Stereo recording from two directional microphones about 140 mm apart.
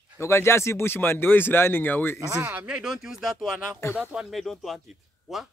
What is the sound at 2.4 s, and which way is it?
Speech, 10° right (ahead or behind).